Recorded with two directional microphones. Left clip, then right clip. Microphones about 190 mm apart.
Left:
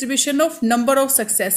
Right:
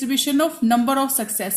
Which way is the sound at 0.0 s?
15° left (ahead or behind).